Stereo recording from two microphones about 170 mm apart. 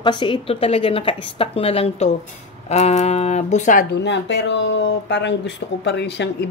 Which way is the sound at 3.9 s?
90° left.